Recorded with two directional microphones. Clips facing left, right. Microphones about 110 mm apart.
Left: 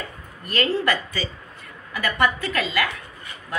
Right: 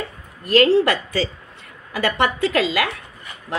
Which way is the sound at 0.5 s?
90° right.